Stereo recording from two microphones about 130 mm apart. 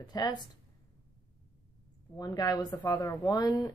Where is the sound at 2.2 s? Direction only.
30° left (ahead or behind).